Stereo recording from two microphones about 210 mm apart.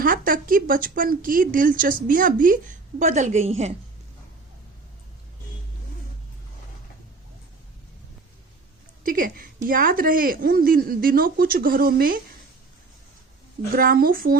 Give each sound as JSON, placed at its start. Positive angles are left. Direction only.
{"t": 0.0, "sound": "a woman's voice", "side_deg": -40}
{"t": 9.0, "sound": "speech", "side_deg": -40}
{"t": 13.7, "sound": "speech", "side_deg": -45}